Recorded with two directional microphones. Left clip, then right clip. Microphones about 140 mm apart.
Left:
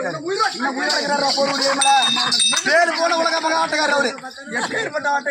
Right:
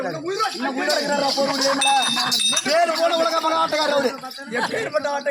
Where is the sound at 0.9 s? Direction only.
5° right (ahead or behind).